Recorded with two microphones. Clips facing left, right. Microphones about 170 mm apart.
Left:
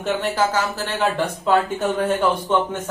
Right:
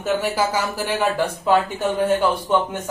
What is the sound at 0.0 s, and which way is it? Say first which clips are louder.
A man's voice: even; 10° right (ahead or behind).